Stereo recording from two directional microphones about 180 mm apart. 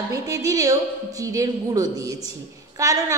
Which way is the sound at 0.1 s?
20° right (ahead or behind).